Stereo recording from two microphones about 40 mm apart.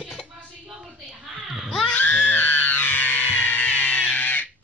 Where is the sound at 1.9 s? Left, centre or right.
Left.